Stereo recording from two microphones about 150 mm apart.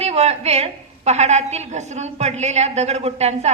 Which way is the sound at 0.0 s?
45° right (ahead or behind).